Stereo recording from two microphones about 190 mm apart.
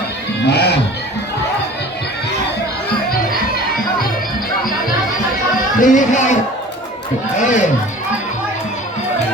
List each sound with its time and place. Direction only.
0.4 s music: 60° left (ahead or behind)
5.8 s music: 40° left (ahead or behind)
7.3 s a sound: 40° left (ahead or behind)